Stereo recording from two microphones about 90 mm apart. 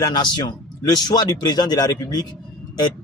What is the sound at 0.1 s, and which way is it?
Speech, 50° left (ahead or behind).